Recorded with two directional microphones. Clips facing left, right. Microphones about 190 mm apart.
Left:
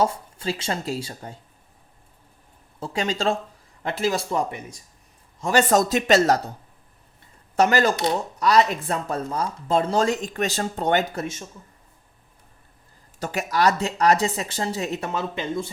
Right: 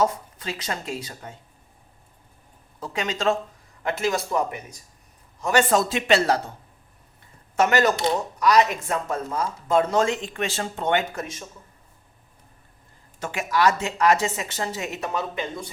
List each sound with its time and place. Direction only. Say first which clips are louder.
0.0 s speech: left 1 dB; 30° left (ahead or behind)
2.8 s speech: even; 30° left (ahead or behind)
7.5 s speech: left 1 dB; 35° left (ahead or behind)
13.1 s speech: even; 40° left (ahead or behind)